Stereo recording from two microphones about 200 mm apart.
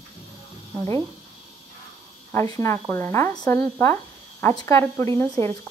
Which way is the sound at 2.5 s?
15° left (ahead or behind).